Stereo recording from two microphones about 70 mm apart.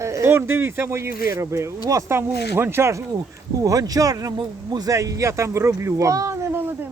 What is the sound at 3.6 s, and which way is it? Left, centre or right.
Speech, right.